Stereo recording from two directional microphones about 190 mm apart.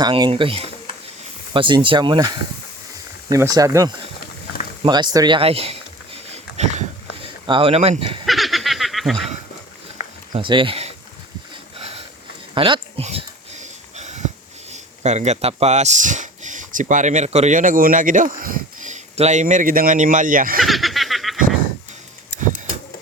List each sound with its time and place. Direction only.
0.0 s speech: 25° right (ahead or behind)
6.3 s a sound: 35° right (ahead or behind)
7.4 s speech: 25° right (ahead or behind)
8.3 s snicker: centre (ahead or behind)
10.3 s speech: 25° right (ahead or behind)
11.8 s a sound: 30° right (ahead or behind)
13.9 s wheeze: 35° right (ahead or behind)
14.7 s speech: 35° right (ahead or behind)
20.6 s snicker: centre (ahead or behind)